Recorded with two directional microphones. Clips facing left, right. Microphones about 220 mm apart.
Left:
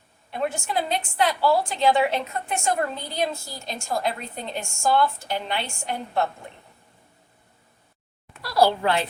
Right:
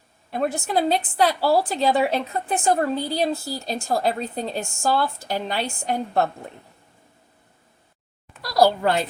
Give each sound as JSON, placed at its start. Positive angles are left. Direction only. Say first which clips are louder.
{"t": 0.3, "sound": "a woman's voice", "louder": "right 3 dB", "side_deg": -40}
{"t": 8.4, "sound": "speech", "louder": "right 2 dB", "side_deg": -40}